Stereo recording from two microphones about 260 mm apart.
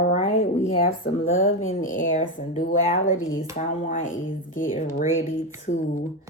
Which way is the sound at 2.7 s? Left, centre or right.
Left.